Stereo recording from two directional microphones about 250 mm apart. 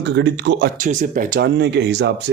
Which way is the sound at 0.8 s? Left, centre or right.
Right.